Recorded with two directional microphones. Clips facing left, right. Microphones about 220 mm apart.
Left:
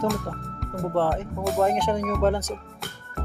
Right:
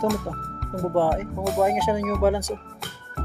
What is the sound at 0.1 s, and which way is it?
Speech, centre (ahead or behind).